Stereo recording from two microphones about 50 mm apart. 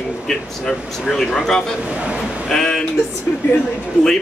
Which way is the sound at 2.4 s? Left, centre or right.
Centre.